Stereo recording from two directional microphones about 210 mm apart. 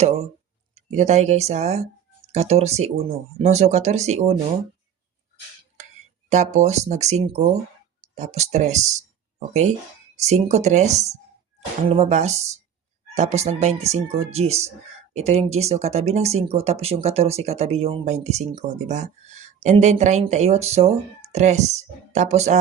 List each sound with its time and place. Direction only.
0.9 s speech: 35° right (ahead or behind)
6.3 s speech: 35° right (ahead or behind)